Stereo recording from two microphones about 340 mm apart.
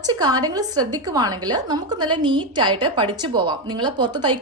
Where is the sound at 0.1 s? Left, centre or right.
Centre.